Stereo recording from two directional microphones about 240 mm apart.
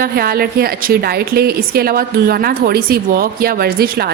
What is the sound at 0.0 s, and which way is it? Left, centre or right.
A woman's voice, right.